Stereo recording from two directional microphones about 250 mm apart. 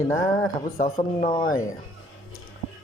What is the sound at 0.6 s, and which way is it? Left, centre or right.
Speech, left.